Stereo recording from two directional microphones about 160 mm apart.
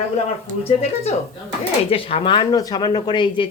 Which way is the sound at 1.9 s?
35° left (ahead or behind).